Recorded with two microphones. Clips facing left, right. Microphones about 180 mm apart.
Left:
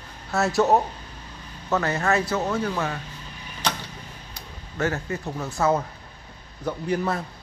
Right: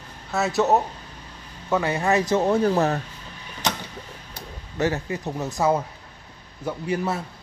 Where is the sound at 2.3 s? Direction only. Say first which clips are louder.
Right 6 dB; 30° right (ahead or behind).